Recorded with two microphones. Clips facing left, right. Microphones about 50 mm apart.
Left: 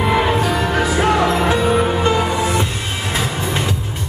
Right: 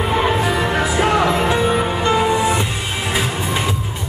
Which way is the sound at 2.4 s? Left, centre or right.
Centre.